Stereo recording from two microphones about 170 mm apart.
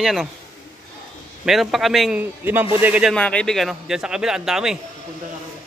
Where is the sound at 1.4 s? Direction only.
Centre (ahead or behind).